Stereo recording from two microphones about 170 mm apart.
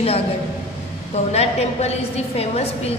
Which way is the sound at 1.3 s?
40° left (ahead or behind).